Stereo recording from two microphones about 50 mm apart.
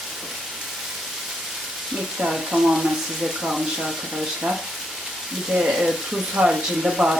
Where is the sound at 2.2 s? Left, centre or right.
Centre.